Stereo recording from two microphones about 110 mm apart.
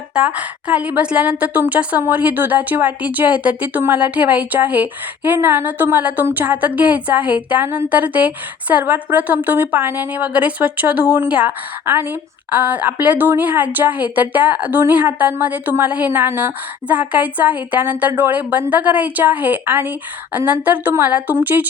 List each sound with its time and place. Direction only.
0.1 s a woman's voice: 10° right (ahead or behind)